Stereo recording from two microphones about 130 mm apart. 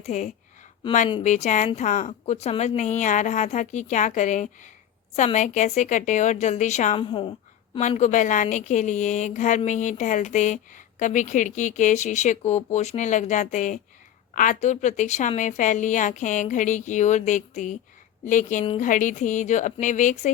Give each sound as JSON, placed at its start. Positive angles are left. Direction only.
{"t": 0.1, "sound": "a woman's voice", "side_deg": 65}
{"t": 3.0, "sound": "a woman's voice", "side_deg": 75}
{"t": 7.0, "sound": "a woman's voice", "side_deg": 40}
{"t": 7.8, "sound": "a woman's voice", "side_deg": 65}
{"t": 14.3, "sound": "a woman's voice", "side_deg": 85}